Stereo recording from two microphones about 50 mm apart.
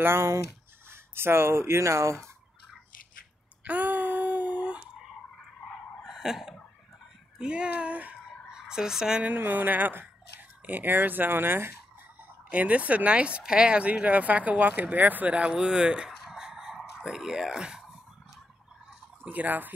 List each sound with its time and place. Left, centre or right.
0.0 s speech: right
3.6 s a sound: right
5.6 s a sound: centre
7.3 s speech: centre
8.3 s fowl: centre
9.2 s speech: right
12.4 s speech: right
16.1 s a sound: centre
19.2 s speech: right